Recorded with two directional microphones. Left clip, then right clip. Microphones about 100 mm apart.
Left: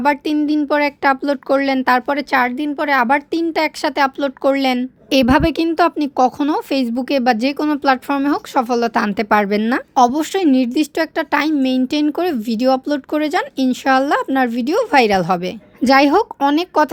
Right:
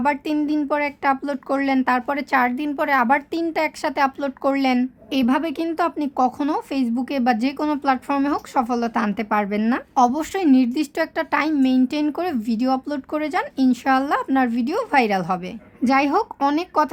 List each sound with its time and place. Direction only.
0.0 s a woman's voice: 35° left (ahead or behind)
5.1 s a woman's voice: 60° left (ahead or behind)
5.7 s a woman's voice: 40° left (ahead or behind)
9.1 s a woman's voice: 50° left (ahead or behind)